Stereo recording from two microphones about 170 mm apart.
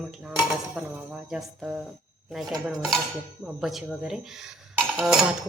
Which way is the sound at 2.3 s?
Centre (ahead or behind).